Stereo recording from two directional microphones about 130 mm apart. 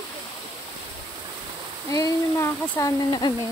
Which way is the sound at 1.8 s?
25° left (ahead or behind).